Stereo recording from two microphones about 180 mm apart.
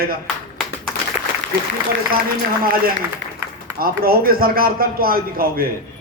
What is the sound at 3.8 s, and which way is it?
A man's voice, 55° right (ahead or behind).